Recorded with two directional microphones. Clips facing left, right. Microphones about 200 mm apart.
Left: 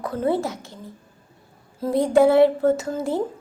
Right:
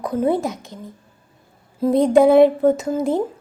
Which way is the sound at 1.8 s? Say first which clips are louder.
Right 3 dB; 20° right (ahead or behind).